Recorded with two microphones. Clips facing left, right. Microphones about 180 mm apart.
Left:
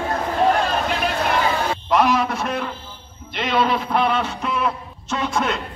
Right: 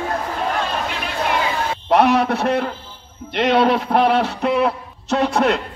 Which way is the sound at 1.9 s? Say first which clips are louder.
Right 4 dB; 65° right (ahead or behind).